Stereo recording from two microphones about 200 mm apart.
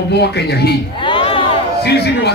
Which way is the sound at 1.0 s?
25° left (ahead or behind).